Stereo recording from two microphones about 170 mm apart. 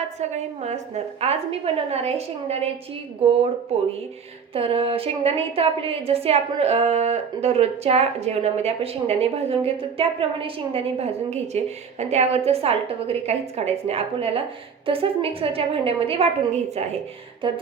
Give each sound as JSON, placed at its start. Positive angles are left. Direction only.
{"t": 0.2, "sound": "a woman's voice", "side_deg": -40}
{"t": 4.5, "sound": "a woman's voice", "side_deg": -35}